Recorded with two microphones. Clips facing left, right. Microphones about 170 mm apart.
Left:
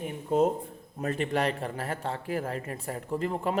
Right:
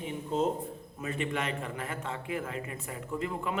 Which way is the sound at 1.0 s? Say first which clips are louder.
Left 5 dB; 40° left (ahead or behind).